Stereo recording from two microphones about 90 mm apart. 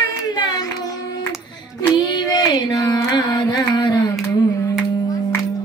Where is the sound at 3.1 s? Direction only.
45° left (ahead or behind).